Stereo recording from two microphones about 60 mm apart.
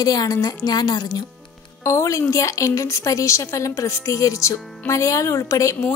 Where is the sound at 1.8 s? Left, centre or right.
Left.